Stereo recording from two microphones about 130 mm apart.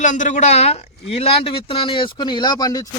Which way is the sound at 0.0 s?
70° left (ahead or behind).